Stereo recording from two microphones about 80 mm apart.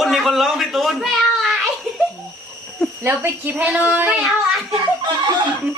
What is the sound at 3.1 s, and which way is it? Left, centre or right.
A woman's voice, right.